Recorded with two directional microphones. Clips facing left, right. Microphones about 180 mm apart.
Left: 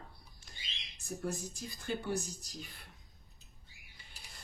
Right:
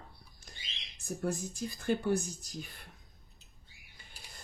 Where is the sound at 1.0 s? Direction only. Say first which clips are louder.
Right 4 dB; 55° right (ahead or behind).